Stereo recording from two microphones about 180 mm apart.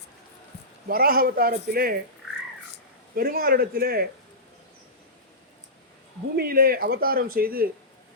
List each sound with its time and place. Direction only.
0.9 s speech: 55° right (ahead or behind)
3.2 s speech: 55° right (ahead or behind)
6.3 s speech: 55° right (ahead or behind)